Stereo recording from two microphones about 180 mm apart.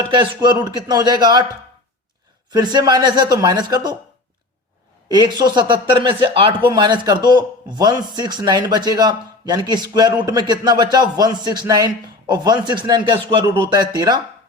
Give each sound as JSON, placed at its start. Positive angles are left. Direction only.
{"t": 0.1, "sound": "speech", "side_deg": -25}
{"t": 2.5, "sound": "speech", "side_deg": -20}
{"t": 5.0, "sound": "speech", "side_deg": -25}